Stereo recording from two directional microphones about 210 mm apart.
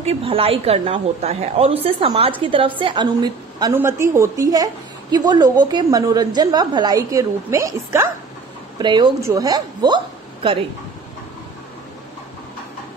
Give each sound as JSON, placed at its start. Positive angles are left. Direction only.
{"t": 0.0, "sound": "a woman's voice", "side_deg": -30}